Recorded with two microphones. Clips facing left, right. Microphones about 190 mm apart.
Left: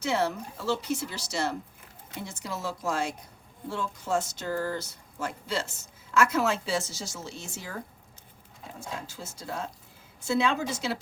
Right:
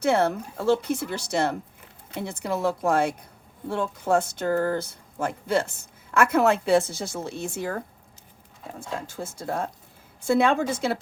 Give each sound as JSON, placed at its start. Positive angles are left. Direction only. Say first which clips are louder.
{"t": 0.0, "sound": "speech", "louder": "right 6 dB", "side_deg": -55}
{"t": 9.0, "sound": "a woman's voice", "louder": "right 7 dB", "side_deg": -55}